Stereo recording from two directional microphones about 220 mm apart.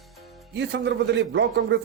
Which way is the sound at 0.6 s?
50° right (ahead or behind).